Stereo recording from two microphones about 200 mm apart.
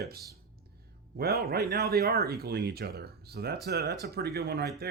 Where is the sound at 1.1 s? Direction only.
50° right (ahead or behind).